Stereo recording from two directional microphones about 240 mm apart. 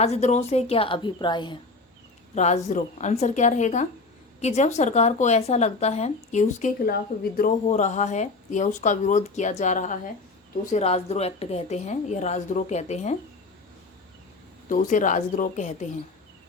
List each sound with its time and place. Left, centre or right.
0.0 s speech: left
14.7 s speech: left